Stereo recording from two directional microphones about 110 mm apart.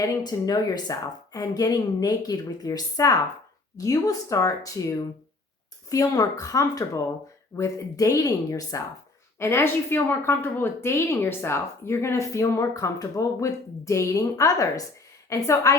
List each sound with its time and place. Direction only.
0.0 s a woman's voice: 35° left (ahead or behind)